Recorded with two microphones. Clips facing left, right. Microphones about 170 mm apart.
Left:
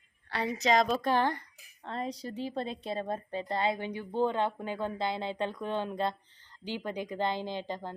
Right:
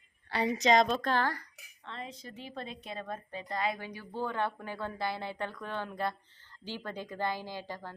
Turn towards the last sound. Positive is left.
turn(degrees=20)  # may be behind; listen again after turning